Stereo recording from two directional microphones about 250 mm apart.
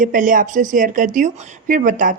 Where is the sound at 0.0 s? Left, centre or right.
Right.